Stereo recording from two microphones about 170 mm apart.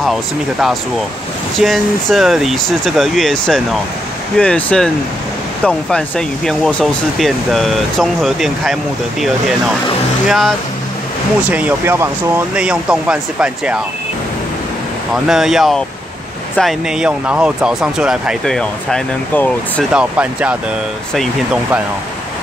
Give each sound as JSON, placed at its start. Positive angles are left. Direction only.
{"t": 0.0, "sound": "speech", "side_deg": 0}
{"t": 10.2, "sound": "speech", "side_deg": 0}
{"t": 11.5, "sound": "speech", "side_deg": -10}
{"t": 15.2, "sound": "speech", "side_deg": 0}
{"t": 19.8, "sound": "speech", "side_deg": -5}